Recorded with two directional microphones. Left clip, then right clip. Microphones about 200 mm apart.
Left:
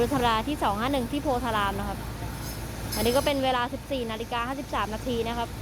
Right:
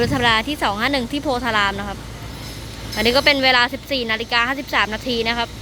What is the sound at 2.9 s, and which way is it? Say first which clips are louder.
Speech: right 9 dB; 10° right (ahead or behind).